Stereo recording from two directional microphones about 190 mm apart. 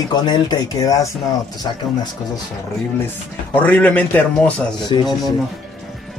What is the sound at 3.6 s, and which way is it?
Speech, 10° left (ahead or behind).